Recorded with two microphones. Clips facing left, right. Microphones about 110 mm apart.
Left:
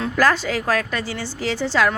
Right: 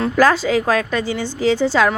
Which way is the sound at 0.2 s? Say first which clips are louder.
Right 4 dB; 15° right (ahead or behind).